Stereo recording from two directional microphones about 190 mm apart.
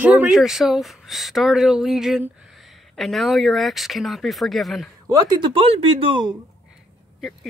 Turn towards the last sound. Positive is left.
turn(degrees=-25)  # may be behind; listen again after turning